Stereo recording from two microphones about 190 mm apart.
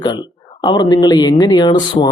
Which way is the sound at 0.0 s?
25° left (ahead or behind).